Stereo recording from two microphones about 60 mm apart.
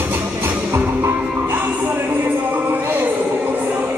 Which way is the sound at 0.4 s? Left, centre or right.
Right.